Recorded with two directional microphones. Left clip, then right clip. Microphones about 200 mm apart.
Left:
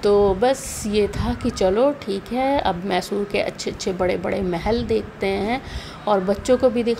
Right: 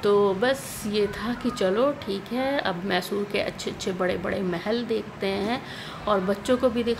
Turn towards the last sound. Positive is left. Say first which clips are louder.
# left 5 dB
turn(degrees=20)  # may be behind; listen again after turning